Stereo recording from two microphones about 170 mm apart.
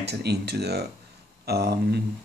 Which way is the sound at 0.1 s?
75° right (ahead or behind).